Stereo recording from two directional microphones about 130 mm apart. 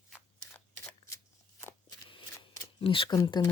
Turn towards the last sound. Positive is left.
turn(degrees=30)  # may be behind; listen again after turning